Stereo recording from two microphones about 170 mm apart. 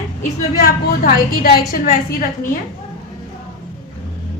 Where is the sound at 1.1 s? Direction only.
60° left (ahead or behind).